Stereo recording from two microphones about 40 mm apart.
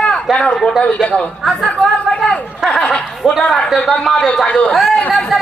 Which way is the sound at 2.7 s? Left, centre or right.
Centre.